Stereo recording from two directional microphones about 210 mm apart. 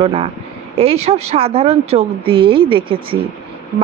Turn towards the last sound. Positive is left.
turn(degrees=-25)  # may be behind; listen again after turning